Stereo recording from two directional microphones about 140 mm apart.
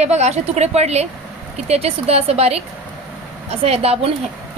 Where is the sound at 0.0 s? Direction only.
50° right (ahead or behind).